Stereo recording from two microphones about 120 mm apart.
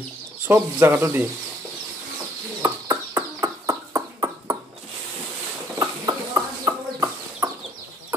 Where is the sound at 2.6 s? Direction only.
25° right (ahead or behind).